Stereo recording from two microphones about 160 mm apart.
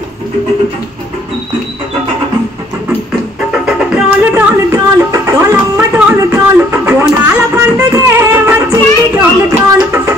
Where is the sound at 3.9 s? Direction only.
15° right (ahead or behind).